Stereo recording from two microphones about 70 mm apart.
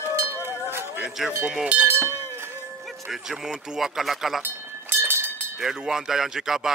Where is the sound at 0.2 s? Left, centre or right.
Right.